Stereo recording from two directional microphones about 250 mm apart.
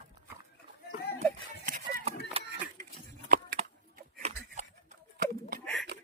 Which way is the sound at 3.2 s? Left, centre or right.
Right.